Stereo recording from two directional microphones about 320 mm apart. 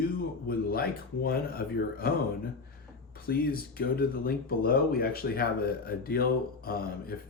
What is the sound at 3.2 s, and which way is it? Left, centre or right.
Speech, left.